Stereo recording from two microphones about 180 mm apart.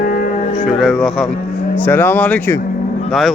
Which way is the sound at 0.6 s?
Centre (ahead or behind).